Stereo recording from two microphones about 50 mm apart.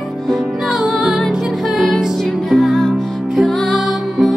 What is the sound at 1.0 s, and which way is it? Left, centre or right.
Music, centre.